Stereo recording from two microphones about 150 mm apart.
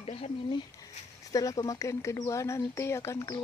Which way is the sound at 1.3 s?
25° left (ahead or behind).